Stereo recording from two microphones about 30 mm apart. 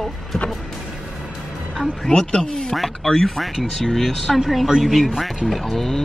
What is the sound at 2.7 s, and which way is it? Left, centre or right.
Speech, centre.